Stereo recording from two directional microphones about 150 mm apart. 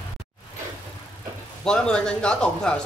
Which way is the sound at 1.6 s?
5° left (ahead or behind).